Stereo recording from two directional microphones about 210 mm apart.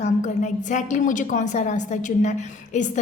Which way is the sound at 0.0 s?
35° left (ahead or behind).